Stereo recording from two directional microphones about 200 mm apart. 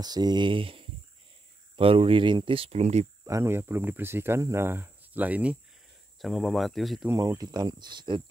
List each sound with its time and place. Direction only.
0.0 s speech: 20° right (ahead or behind)
3.3 s speech: 15° right (ahead or behind)
7.1 s speech: 15° right (ahead or behind)